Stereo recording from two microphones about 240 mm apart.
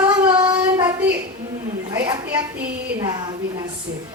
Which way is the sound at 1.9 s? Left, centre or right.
Centre.